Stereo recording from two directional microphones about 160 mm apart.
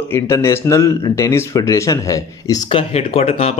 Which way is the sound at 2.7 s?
35° left (ahead or behind).